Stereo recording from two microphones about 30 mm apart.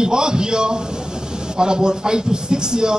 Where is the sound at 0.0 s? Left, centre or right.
Right.